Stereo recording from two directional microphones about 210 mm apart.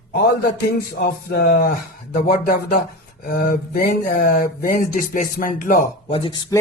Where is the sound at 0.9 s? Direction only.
50° left (ahead or behind).